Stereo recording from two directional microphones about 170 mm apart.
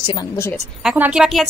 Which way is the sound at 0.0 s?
25° left (ahead or behind).